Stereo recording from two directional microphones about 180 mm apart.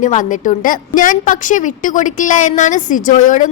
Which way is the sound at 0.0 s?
45° left (ahead or behind).